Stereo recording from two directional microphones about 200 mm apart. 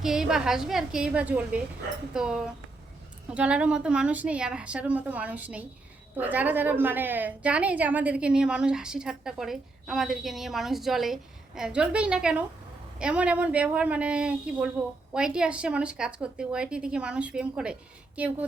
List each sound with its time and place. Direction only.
0.0 s a woman's voice: centre (ahead or behind)